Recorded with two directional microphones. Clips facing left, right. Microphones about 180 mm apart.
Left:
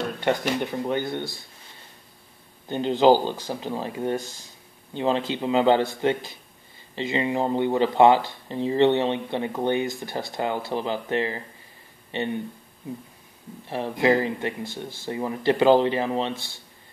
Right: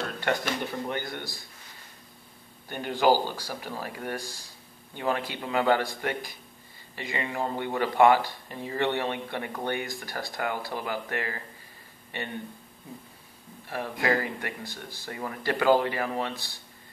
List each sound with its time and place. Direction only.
0.8 s speech: 20° left (ahead or behind)
2.7 s speech: 20° left (ahead or behind)
13.7 s speech: 20° left (ahead or behind)